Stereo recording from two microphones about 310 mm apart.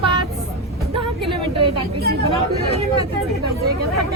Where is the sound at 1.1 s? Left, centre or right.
Centre.